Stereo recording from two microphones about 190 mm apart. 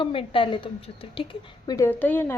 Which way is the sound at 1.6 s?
15° left (ahead or behind).